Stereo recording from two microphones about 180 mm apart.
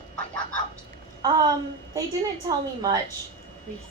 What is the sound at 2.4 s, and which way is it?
Speech, 20° right (ahead or behind).